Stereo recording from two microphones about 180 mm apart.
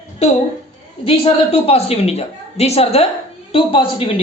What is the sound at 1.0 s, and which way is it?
A woman's voice, 30° left (ahead or behind).